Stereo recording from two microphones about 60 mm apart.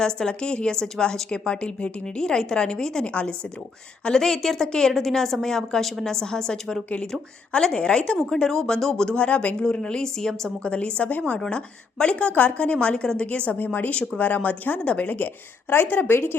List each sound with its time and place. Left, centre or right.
0.0 s a woman's voice: centre; by 16.3 s left